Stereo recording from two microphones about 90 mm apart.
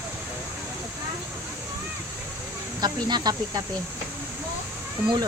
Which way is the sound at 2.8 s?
50° right (ahead or behind).